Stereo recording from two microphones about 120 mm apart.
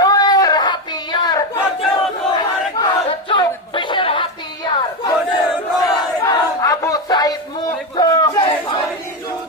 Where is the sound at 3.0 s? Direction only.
50° left (ahead or behind).